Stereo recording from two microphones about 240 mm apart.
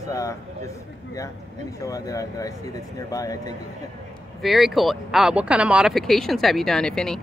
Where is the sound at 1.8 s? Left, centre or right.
Centre.